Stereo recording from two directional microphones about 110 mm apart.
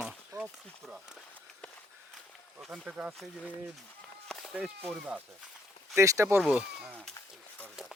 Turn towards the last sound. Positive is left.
turn(degrees=-10)  # may be behind; listen again after turning